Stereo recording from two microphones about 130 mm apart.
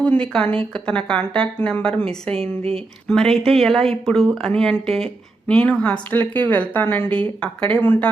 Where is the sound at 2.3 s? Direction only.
50° right (ahead or behind).